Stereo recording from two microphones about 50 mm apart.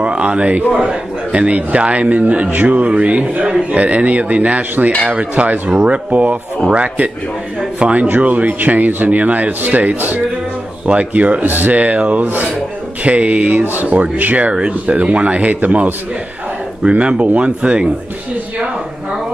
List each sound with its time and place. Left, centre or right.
0.0 s a man's voice: right
10.9 s a man's voice: right